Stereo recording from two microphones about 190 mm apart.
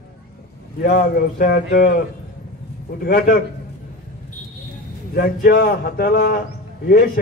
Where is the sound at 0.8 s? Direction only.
50° left (ahead or behind).